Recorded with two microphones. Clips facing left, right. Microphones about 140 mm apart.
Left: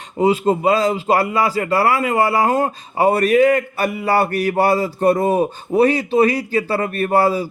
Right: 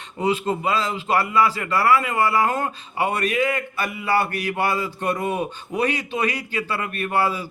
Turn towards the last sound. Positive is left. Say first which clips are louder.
# left 7 dB
turn(degrees=40)  # may be behind; listen again after turning